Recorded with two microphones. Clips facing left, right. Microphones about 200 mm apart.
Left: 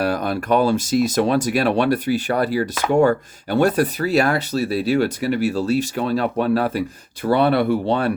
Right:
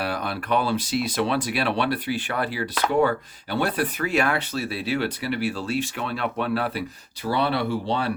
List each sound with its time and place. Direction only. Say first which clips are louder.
0.0 s speech: left 7 dB; 45° left (ahead or behind)